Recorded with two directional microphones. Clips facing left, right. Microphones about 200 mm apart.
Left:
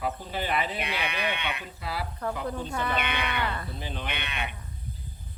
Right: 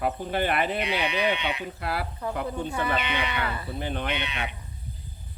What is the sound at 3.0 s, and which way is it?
Speech, 55° left (ahead or behind).